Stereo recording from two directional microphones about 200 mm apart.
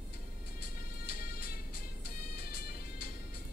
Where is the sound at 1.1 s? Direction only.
45° left (ahead or behind).